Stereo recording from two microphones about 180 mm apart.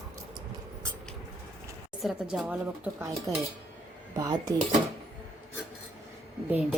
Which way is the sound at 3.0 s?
15° right (ahead or behind).